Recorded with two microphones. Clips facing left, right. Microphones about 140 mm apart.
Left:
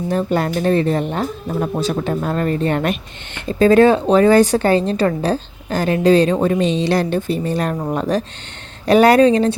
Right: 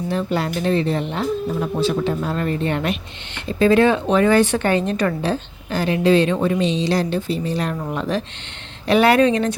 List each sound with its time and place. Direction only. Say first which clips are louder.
0.1 s a woman's voice: left 4 dB; 45° left (ahead or behind)